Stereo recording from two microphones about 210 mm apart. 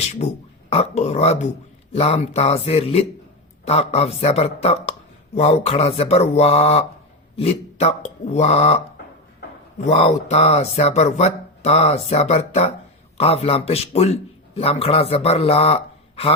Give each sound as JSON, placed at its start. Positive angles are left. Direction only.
{"t": 0.7, "sound": "a man's voice", "side_deg": 30}